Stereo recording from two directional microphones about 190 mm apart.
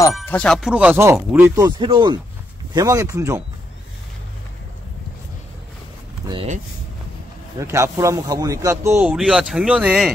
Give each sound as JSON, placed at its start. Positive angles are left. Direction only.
{"t": 0.2, "sound": "speech", "side_deg": 10}
{"t": 1.6, "sound": "speech", "side_deg": -20}
{"t": 7.5, "sound": "speech", "side_deg": -15}
{"t": 9.1, "sound": "speech", "side_deg": -5}